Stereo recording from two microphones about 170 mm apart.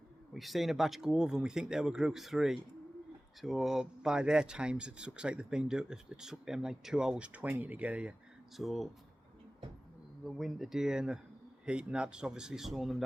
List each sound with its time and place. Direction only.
0.3 s speech: centre (ahead or behind)
10.2 s speech: centre (ahead or behind)